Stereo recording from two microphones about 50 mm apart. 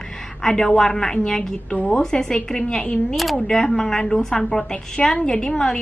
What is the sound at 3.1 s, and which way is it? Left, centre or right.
A woman's voice, centre.